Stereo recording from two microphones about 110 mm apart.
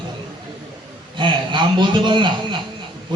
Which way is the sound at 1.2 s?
45° right (ahead or behind).